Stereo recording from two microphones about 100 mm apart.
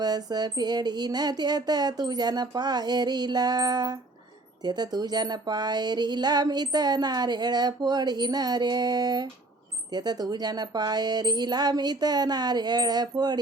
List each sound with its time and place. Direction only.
0.0 s speech: 45° right (ahead or behind)